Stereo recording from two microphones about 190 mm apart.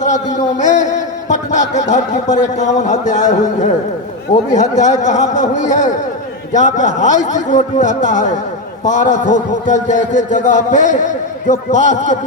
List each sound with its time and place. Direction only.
0.0 s a man's voice: 40° left (ahead or behind)